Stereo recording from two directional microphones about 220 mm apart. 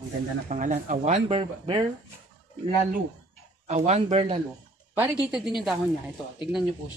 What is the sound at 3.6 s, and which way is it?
Speech, 30° right (ahead or behind).